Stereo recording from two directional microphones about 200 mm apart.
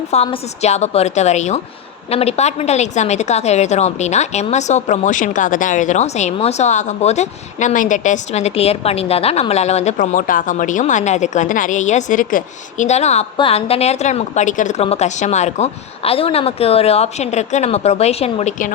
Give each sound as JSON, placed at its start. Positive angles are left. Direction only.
{"t": 0.1, "sound": "a woman's voice", "side_deg": 30}